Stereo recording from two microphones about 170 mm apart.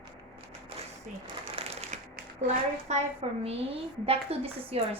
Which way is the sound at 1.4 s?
35° right (ahead or behind).